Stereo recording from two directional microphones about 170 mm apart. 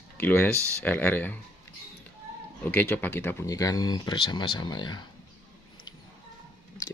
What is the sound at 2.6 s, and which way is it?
Speech, 10° left (ahead or behind).